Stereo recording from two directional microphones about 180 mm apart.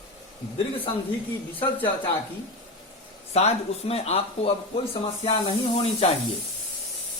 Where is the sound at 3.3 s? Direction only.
35° left (ahead or behind).